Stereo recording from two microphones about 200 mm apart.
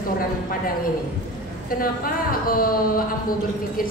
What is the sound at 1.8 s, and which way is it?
A woman's voice, 45° left (ahead or behind).